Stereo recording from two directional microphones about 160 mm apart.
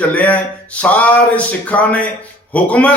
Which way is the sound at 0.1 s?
10° left (ahead or behind).